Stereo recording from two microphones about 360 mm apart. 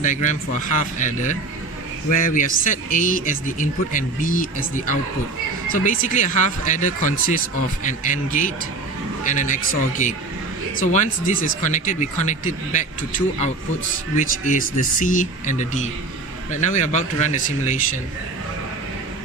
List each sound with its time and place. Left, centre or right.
0.0 s a man's voice: left